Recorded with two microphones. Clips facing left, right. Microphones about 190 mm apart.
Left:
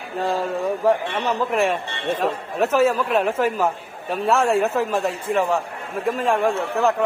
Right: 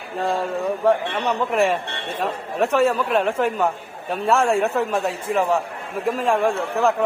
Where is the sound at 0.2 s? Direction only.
Centre (ahead or behind).